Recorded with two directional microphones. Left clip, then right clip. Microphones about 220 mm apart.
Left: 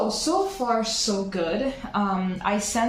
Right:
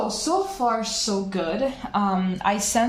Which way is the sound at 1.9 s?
50° right (ahead or behind).